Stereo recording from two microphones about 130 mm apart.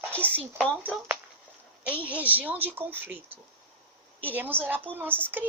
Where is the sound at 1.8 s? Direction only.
10° right (ahead or behind).